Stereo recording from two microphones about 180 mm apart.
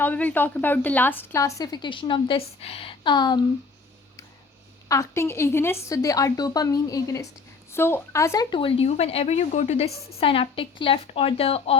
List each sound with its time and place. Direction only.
0.0 s a woman's voice: 10° left (ahead or behind)
4.9 s a woman's voice: 15° left (ahead or behind); by 11.8 s 35° left (ahead or behind)